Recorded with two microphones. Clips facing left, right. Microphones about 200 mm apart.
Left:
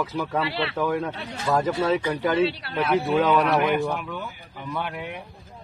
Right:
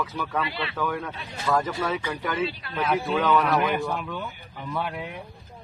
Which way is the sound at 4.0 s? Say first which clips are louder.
Even; 5° left (ahead or behind).